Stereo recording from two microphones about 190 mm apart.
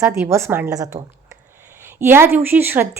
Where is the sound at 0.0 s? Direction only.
15° right (ahead or behind).